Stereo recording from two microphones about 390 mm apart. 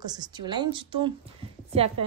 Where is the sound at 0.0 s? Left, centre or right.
Centre.